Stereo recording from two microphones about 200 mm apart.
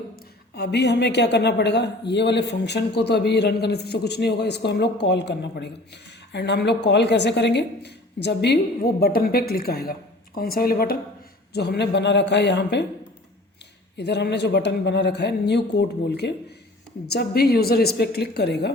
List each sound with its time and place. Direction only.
0.5 s a woman's voice: 55° left (ahead or behind)
13.9 s a woman's voice: 55° left (ahead or behind)